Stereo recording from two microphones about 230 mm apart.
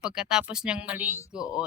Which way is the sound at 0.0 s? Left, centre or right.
Centre.